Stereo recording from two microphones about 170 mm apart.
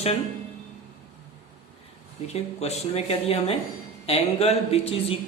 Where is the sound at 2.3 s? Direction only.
40° left (ahead or behind).